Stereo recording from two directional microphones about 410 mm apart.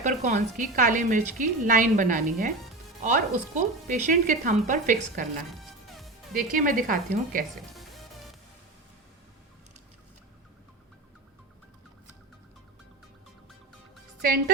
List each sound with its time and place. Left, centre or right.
0.0 s a woman's voice: centre
6.3 s a woman's voice: centre
7.8 s music: centre